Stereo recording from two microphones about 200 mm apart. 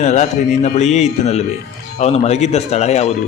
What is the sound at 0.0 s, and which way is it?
A man's voice, 35° left (ahead or behind).